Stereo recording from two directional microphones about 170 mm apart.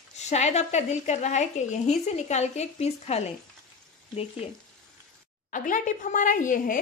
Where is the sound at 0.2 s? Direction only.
40° left (ahead or behind).